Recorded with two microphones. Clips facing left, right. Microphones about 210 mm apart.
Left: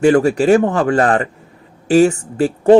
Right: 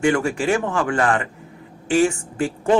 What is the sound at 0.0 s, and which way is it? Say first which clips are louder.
Speech: left 8 dB; 35° left (ahead or behind).